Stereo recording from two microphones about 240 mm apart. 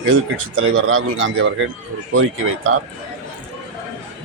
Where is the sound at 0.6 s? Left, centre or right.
Right.